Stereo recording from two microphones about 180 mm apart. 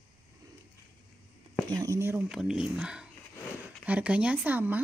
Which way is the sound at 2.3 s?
5° right (ahead or behind).